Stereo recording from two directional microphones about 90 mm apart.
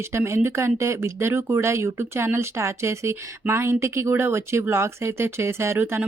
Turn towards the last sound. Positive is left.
turn(degrees=-25)  # may be behind; listen again after turning